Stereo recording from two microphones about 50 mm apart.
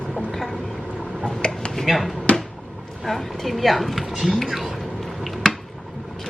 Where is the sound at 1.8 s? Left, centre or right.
Centre.